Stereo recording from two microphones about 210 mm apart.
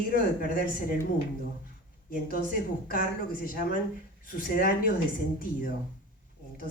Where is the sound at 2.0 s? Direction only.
45° left (ahead or behind).